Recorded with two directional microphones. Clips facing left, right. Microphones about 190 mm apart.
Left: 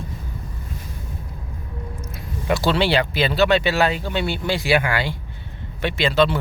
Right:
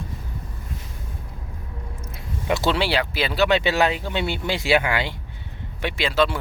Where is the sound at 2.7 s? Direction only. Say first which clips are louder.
Left 3 dB; 5° right (ahead or behind).